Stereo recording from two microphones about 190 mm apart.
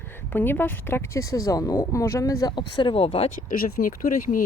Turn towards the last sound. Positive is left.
turn(degrees=45)  # may be behind; listen again after turning